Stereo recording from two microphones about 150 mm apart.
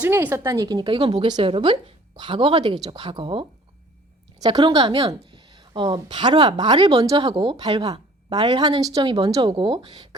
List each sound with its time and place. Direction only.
0.0 s a woman's voice: 10° right (ahead or behind); by 10.2 s 30° right (ahead or behind)